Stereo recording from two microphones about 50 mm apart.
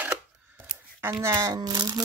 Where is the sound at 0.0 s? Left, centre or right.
Right.